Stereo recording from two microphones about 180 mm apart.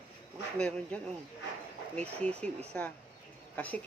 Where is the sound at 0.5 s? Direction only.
5° left (ahead or behind).